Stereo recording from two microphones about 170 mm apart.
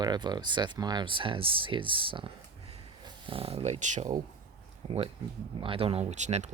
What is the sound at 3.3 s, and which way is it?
Speech, 35° right (ahead or behind).